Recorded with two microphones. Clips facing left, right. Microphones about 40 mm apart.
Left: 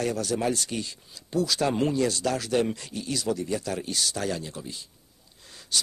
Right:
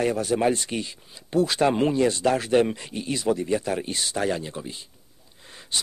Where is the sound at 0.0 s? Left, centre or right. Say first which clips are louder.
Right 5 dB; right.